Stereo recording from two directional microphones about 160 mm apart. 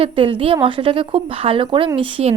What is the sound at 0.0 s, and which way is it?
A woman's voice, 35° right (ahead or behind).